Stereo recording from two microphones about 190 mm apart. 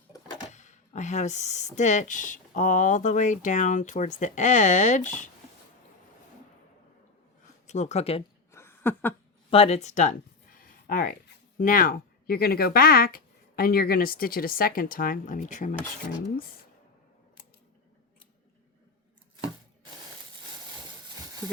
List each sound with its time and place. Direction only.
0.5 s speech: 40° left (ahead or behind)
7.7 s speech: 35° left (ahead or behind)
8.5 s a sound: 10° left (ahead or behind)
9.5 s speech: 30° left (ahead or behind)
10.8 s speech: 50° left (ahead or behind)